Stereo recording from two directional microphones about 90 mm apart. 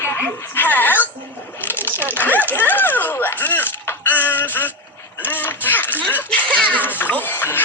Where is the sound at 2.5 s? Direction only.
20° left (ahead or behind).